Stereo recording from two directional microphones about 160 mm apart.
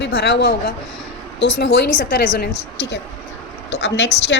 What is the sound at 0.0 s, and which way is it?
A woman's voice, 90° left.